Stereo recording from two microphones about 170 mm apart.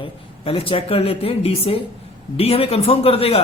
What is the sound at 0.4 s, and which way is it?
A man's voice, 35° left (ahead or behind).